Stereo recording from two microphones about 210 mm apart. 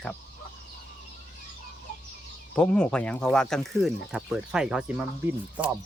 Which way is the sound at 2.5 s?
5° left (ahead or behind).